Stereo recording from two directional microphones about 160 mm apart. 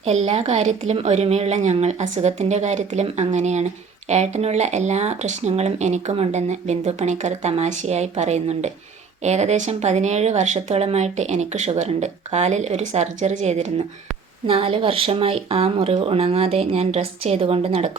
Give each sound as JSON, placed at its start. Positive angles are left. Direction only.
{"t": 0.0, "sound": "speech", "side_deg": -40}
{"t": 14.4, "sound": "speech", "side_deg": -35}